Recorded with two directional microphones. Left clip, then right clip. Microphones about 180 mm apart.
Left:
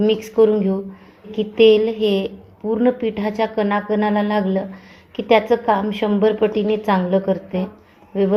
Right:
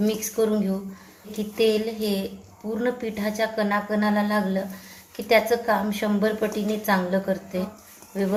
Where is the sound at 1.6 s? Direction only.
45° left (ahead or behind).